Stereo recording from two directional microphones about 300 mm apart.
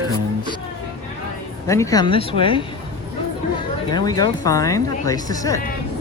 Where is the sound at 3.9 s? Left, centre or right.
Centre.